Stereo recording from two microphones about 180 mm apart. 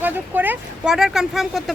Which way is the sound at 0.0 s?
10° right (ahead or behind).